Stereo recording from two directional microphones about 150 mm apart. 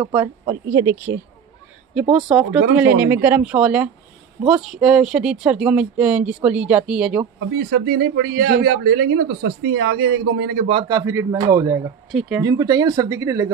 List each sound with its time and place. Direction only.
0.1 s speech: 15° right (ahead or behind)
2.0 s speech: 5° right (ahead or behind)
7.5 s speech: 90° right
10.9 s speech: 20° right (ahead or behind)
12.1 s speech: centre (ahead or behind)
12.4 s speech: 25° right (ahead or behind)